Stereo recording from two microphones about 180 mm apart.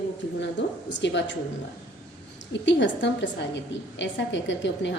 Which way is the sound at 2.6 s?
85° left.